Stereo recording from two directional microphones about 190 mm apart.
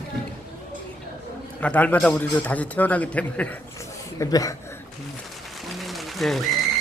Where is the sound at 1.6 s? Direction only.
5° left (ahead or behind).